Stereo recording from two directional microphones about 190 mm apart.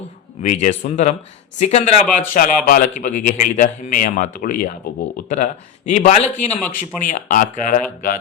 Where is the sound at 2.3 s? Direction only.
45° left (ahead or behind).